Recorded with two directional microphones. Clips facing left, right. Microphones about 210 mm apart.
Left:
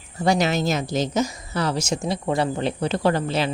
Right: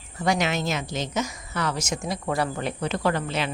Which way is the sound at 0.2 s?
35° left (ahead or behind).